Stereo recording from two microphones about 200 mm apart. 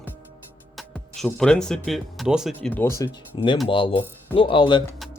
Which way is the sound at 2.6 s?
10° left (ahead or behind).